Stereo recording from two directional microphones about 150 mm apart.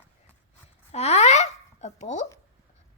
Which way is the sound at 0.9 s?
45° left (ahead or behind).